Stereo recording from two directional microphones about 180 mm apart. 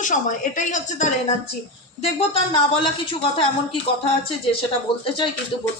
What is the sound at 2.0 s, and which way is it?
Speech, 30° left (ahead or behind).